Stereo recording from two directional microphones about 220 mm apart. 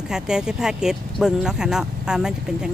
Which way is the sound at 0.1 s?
5° right (ahead or behind).